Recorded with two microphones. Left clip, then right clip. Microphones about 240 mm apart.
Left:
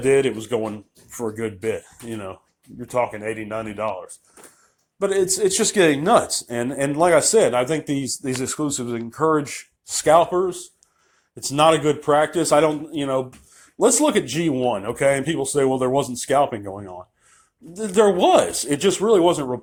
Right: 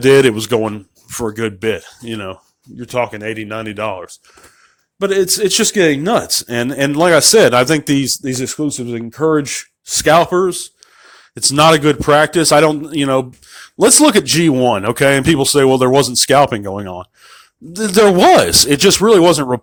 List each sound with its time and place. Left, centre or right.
0.0 s a man's voice: right